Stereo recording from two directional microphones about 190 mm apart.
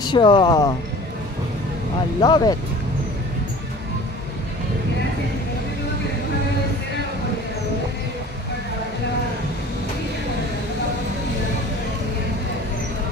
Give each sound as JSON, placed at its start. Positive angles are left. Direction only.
{"t": 0.0, "sound": "speech", "side_deg": 25}
{"t": 2.2, "sound": "speech", "side_deg": 25}